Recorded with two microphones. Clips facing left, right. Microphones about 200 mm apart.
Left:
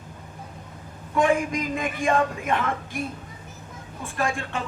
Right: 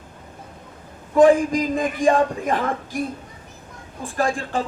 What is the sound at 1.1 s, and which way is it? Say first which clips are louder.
A man's voice: right 8 dB; 35° right (ahead or behind).